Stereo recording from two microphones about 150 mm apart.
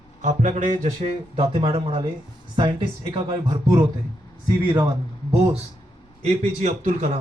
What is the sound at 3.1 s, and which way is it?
A man's voice, 25° right (ahead or behind).